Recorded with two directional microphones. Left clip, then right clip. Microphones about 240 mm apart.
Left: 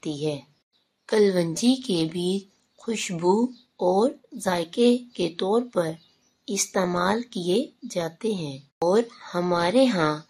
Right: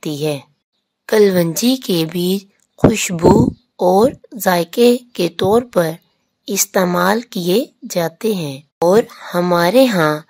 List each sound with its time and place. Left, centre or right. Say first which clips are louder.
0.0 s speech: right 8 dB; right